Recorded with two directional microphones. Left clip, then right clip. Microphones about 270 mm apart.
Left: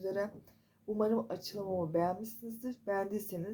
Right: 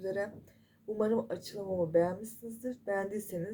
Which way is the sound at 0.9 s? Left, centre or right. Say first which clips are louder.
Right 2 dB; left.